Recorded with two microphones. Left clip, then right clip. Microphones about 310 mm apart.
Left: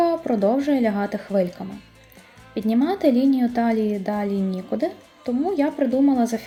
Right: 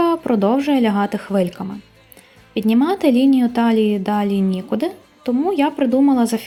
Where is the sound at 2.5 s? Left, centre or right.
Right.